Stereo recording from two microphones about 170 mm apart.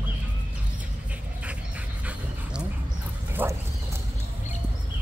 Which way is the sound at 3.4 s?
10° right (ahead or behind).